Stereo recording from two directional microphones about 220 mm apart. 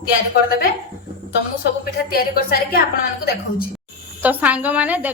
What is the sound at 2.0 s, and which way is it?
Speech, 40° left (ahead or behind).